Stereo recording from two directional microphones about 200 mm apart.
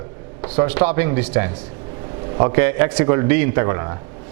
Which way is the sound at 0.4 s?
10° right (ahead or behind).